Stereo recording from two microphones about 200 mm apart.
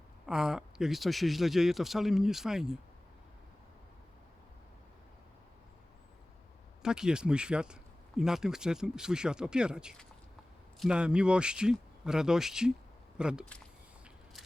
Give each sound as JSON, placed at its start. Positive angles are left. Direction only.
{"t": 0.3, "sound": "speech", "side_deg": -5}
{"t": 6.8, "sound": "speech", "side_deg": -5}